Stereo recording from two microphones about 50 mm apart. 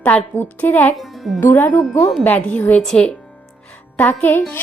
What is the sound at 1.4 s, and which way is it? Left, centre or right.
Speech, left.